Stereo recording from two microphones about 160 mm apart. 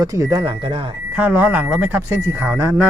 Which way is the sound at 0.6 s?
35° right (ahead or behind).